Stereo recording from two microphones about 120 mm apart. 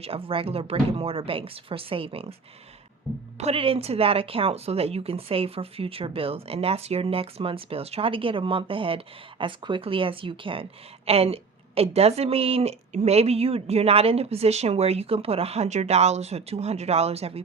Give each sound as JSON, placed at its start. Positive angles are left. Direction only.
{"t": 0.0, "sound": "speech", "side_deg": -50}
{"t": 3.3, "sound": "a woman's voice", "side_deg": -60}